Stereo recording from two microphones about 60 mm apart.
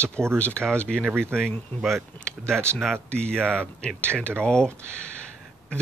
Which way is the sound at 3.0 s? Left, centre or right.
Centre.